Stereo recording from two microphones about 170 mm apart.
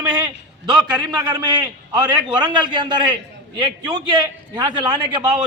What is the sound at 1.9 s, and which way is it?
A man's voice, 25° right (ahead or behind).